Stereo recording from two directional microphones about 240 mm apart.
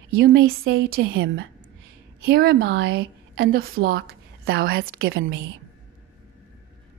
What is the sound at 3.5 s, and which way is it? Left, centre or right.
A woman's voice, right.